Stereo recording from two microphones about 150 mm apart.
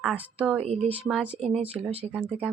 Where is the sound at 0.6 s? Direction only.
45° right (ahead or behind).